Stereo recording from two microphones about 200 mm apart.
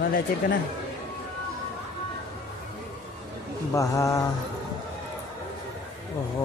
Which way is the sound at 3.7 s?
15° left (ahead or behind).